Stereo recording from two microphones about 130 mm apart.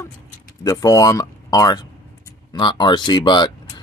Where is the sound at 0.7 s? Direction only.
25° left (ahead or behind).